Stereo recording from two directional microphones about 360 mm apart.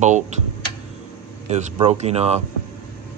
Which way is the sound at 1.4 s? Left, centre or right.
Centre.